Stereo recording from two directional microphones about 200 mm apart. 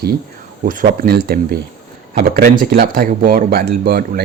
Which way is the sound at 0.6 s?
45° right (ahead or behind).